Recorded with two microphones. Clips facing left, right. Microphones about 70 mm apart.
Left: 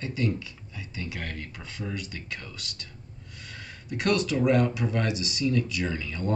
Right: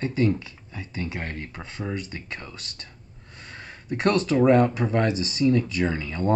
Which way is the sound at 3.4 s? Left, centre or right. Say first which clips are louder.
Right 3 dB; right.